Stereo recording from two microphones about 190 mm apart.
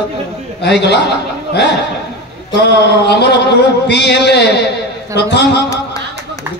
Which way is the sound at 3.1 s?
65° left (ahead or behind).